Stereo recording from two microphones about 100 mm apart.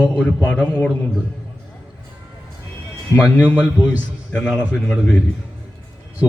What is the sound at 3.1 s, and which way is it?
Speech, 30° left (ahead or behind).